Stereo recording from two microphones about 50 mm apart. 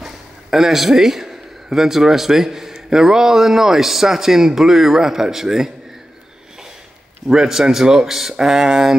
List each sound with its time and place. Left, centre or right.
0.0 s a man's voice: centre
7.2 s speech: centre